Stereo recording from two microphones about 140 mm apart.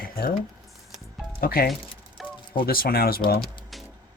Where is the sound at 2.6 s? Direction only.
90° left.